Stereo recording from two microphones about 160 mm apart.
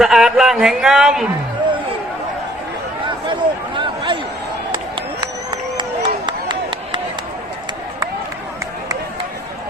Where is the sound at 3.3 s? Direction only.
30° right (ahead or behind).